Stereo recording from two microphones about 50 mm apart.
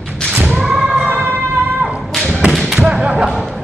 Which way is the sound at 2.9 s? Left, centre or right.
Centre.